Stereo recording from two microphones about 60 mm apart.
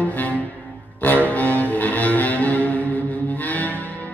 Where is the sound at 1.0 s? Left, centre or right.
Left.